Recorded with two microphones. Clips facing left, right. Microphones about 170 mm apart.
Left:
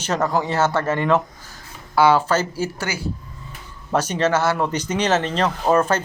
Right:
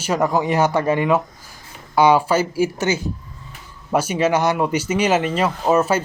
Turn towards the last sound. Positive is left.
turn(degrees=-10)  # may be behind; listen again after turning